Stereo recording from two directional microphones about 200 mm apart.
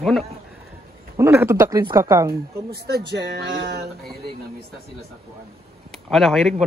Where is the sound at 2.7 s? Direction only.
55° right (ahead or behind).